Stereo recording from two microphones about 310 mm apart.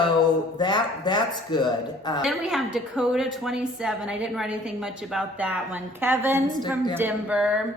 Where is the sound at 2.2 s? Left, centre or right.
Centre.